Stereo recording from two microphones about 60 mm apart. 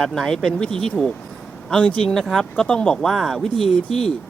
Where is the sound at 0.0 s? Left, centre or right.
Centre.